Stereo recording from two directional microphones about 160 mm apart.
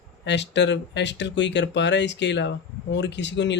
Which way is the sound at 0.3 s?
90° left.